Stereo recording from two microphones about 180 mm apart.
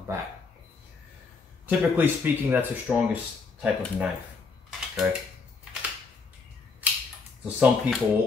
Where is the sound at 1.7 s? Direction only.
10° right (ahead or behind).